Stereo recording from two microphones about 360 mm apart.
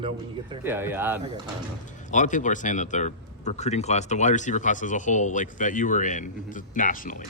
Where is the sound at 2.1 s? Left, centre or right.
Left.